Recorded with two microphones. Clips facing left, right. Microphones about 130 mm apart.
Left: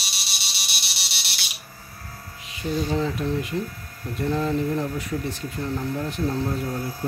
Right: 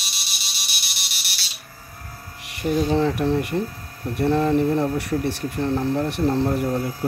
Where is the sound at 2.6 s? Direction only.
65° right (ahead or behind).